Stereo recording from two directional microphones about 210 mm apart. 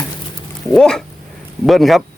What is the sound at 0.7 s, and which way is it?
Speech, 5° left (ahead or behind).